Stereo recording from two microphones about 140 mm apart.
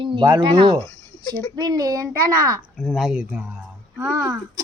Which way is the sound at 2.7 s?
Centre (ahead or behind).